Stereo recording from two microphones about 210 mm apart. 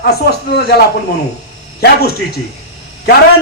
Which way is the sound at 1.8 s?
50° left (ahead or behind).